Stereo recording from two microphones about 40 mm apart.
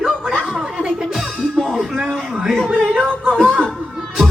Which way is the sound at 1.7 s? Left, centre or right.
Centre.